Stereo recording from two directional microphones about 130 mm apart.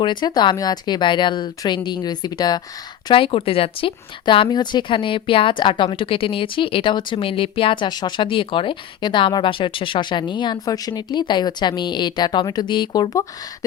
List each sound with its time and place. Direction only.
0.0 s speech: 35° left (ahead or behind)
3.1 s speech: 45° left (ahead or behind)